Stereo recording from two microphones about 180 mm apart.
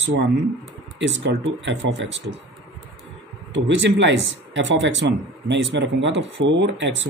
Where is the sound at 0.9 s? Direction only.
85° right.